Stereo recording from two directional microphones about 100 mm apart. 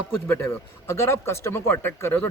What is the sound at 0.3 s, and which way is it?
A man's voice, 25° left (ahead or behind).